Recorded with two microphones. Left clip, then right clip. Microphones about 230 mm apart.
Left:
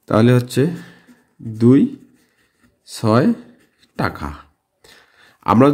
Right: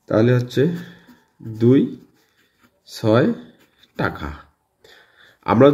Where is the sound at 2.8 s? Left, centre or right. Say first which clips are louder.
Left 1 dB; left.